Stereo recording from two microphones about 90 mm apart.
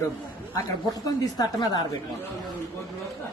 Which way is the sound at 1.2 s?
45° left (ahead or behind).